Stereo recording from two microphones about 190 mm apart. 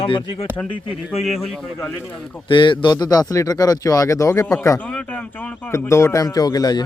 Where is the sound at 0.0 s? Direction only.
30° left (ahead or behind).